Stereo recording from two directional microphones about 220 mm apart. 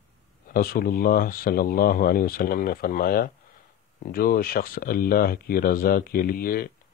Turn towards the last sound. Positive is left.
turn(degrees=40)  # may be behind; listen again after turning